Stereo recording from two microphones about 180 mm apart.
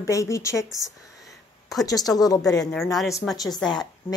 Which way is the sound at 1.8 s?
20° left (ahead or behind).